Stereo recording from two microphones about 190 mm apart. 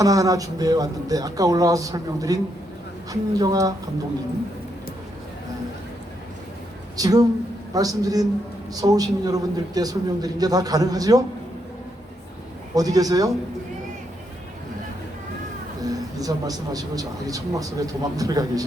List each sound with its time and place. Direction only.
0.0 s a man's voice: 20° right (ahead or behind)
6.9 s a man's voice: 20° right (ahead or behind)
12.7 s a man's voice: 20° right (ahead or behind)
15.8 s a man's voice: 20° right (ahead or behind)